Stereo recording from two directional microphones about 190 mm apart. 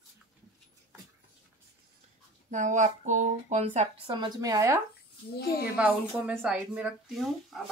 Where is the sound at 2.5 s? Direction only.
40° right (ahead or behind).